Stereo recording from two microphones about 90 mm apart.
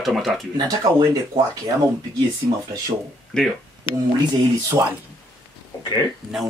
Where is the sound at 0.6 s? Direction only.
45° right (ahead or behind).